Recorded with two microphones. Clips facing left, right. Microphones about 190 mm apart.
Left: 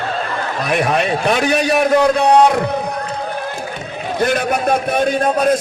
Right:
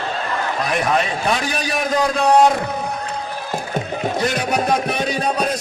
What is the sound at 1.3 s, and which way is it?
A man's voice, 65° left (ahead or behind).